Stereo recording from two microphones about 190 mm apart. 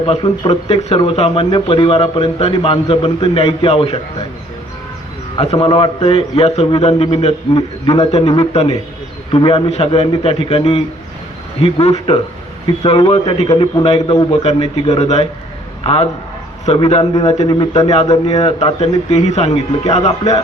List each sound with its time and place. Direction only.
0.0 s speech: 25° left (ahead or behind)
5.4 s a man's voice: 30° left (ahead or behind)
7.5 s a man's voice: 20° left (ahead or behind)
18.3 s a man's voice: 35° left (ahead or behind)